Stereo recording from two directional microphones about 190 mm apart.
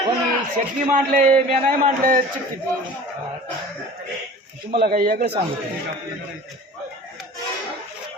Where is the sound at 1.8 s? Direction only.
45° right (ahead or behind).